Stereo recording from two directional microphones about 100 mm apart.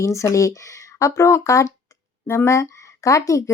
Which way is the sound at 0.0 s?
30° left (ahead or behind).